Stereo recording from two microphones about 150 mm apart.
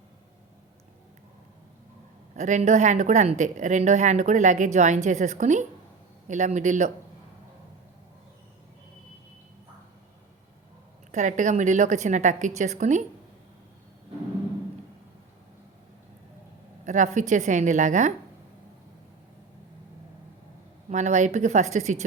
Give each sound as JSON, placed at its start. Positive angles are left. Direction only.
{"t": 2.3, "sound": "speech", "side_deg": -50}
{"t": 11.1, "sound": "speech", "side_deg": -55}
{"t": 16.8, "sound": "speech", "side_deg": -55}
{"t": 20.9, "sound": "speech", "side_deg": -50}